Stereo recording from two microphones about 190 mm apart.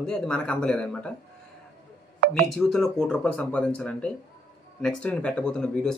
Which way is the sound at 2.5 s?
Centre (ahead or behind).